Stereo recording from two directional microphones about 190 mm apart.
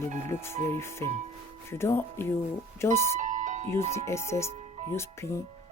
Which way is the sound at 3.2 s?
45° right (ahead or behind).